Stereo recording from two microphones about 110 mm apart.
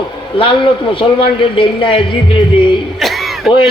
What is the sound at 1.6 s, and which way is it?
Speech, 50° left (ahead or behind).